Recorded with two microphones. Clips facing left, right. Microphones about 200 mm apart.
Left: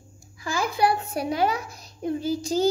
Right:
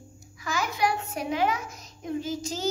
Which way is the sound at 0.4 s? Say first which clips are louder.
Left 4 dB; 30° left (ahead or behind).